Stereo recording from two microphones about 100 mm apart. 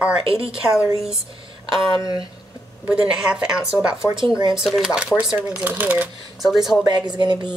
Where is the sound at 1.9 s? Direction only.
45° left (ahead or behind).